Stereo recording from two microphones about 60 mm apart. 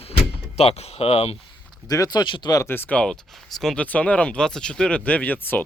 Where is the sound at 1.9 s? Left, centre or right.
Left.